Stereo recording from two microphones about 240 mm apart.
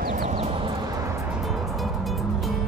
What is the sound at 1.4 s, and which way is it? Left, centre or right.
Music, centre.